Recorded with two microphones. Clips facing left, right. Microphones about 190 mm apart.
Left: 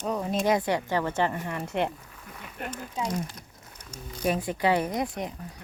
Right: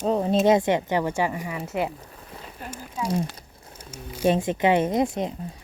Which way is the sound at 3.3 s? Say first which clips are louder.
Right 2 dB; 30° right (ahead or behind).